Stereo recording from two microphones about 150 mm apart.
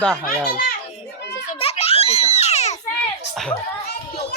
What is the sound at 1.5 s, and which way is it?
Baby laughter, 40° left (ahead or behind).